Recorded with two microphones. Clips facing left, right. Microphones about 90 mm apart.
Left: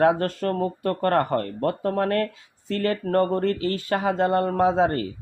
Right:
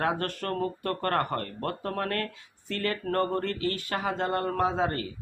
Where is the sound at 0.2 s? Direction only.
25° left (ahead or behind); by 4.1 s 40° left (ahead or behind).